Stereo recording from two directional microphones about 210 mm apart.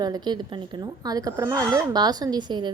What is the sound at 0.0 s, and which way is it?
A woman's voice, 20° right (ahead or behind).